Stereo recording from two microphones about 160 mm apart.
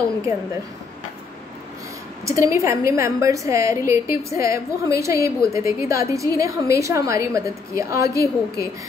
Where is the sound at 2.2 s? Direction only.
20° right (ahead or behind).